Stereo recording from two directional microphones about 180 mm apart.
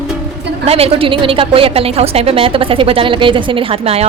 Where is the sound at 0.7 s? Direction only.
35° right (ahead or behind).